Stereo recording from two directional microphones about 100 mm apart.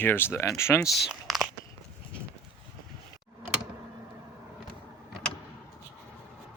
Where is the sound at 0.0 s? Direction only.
20° left (ahead or behind).